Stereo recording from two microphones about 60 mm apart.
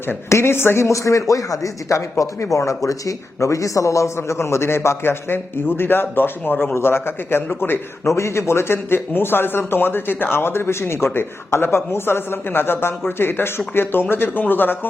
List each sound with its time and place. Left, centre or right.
0.3 s speech: left
0.9 s a man's voice: left
8.1 s speech: left